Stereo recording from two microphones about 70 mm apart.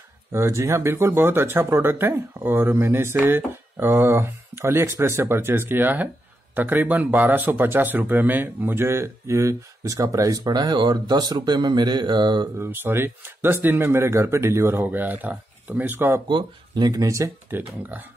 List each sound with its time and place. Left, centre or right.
0.3 s speech: right
12.5 s speech: right
14.9 s speech: right
16.3 s speech: right
17.0 s speech: right
17.5 s speech: right